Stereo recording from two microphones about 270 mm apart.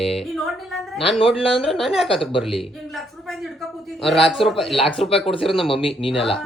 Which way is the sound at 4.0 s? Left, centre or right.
Centre.